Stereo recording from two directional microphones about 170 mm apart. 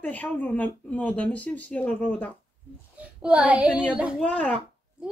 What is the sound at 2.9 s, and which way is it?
Speech, 5° right (ahead or behind).